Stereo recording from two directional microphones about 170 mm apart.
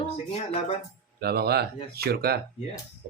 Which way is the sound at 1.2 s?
70° right (ahead or behind).